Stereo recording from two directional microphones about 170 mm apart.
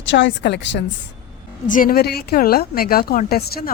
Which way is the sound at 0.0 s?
90° left.